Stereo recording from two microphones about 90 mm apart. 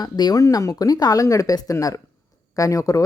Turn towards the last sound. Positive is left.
turn(degrees=40)  # may be behind; listen again after turning